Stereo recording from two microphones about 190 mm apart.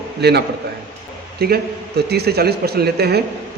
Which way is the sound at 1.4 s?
55° right (ahead or behind).